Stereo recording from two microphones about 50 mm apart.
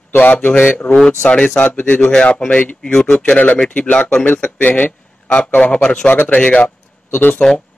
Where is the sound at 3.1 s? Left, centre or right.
Left.